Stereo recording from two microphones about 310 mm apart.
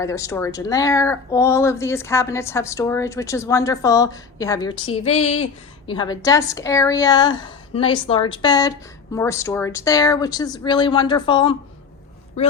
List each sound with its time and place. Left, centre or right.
0.0 s a woman's voice: centre